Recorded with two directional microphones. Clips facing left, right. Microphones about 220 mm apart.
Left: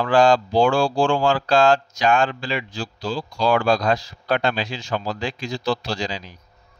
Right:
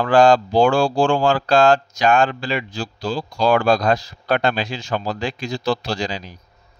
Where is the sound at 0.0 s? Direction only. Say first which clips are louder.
Right 3 dB; 50° right (ahead or behind).